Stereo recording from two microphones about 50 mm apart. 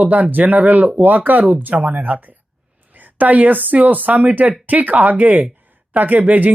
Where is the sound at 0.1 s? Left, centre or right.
Right.